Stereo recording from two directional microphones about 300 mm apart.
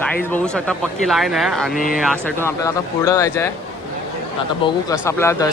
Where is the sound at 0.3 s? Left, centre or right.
Centre.